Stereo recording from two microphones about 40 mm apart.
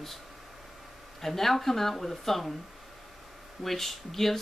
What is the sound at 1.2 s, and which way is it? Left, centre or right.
Speech, centre.